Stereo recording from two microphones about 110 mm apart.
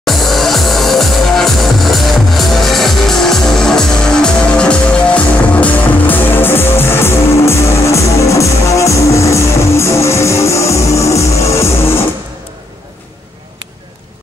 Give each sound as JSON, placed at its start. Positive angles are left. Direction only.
{"t": 0.0, "sound": "music", "side_deg": 0}